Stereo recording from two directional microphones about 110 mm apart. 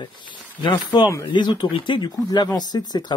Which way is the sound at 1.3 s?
40° left (ahead or behind).